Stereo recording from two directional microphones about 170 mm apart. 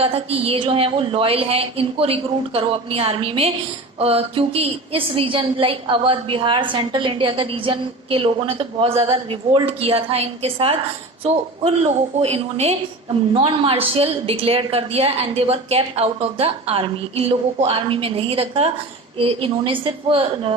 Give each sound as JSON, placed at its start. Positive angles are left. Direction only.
{"t": 0.0, "sound": "a woman's voice", "side_deg": -35}